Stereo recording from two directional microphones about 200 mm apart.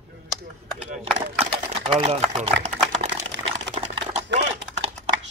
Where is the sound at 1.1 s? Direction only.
30° right (ahead or behind).